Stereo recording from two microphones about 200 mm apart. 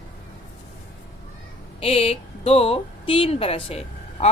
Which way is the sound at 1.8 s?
30° left (ahead or behind).